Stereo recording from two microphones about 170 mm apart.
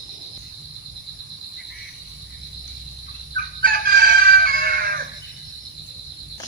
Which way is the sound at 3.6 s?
60° right (ahead or behind).